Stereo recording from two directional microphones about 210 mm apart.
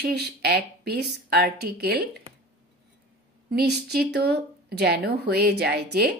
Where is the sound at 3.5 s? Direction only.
50° right (ahead or behind).